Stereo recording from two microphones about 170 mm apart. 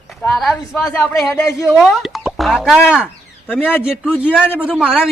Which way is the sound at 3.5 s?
10° left (ahead or behind).